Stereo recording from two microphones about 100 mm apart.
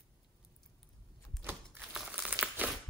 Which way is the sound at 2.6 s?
15° right (ahead or behind).